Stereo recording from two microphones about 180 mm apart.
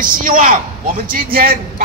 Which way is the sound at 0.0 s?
50° right (ahead or behind).